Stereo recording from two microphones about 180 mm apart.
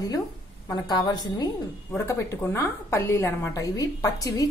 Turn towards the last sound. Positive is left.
turn(degrees=20)  # may be behind; listen again after turning